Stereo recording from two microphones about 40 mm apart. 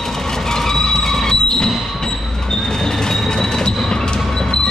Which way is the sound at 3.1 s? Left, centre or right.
Centre.